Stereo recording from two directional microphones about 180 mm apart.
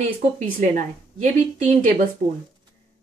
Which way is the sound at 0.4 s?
40° right (ahead or behind).